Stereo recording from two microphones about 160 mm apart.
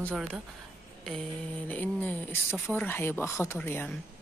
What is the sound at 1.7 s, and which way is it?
Speech, 10° left (ahead or behind).